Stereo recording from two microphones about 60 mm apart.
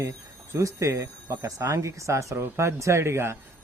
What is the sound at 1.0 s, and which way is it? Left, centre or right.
Speech, right.